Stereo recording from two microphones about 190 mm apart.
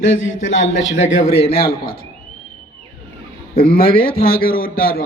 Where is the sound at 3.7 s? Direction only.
50° left (ahead or behind).